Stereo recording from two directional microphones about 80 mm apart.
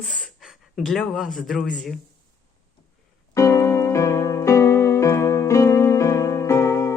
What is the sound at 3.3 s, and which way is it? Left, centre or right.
Music, left.